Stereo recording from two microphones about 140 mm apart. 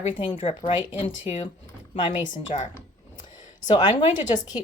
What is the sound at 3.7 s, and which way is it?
Speech, 35° left (ahead or behind).